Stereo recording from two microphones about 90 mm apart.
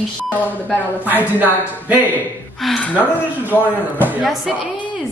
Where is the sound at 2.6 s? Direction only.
Centre (ahead or behind).